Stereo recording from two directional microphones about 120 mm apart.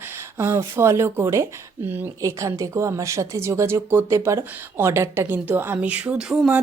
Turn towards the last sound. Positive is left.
turn(degrees=-5)  # may be behind; listen again after turning